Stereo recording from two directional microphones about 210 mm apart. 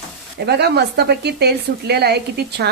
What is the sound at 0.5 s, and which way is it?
Speech, 50° right (ahead or behind).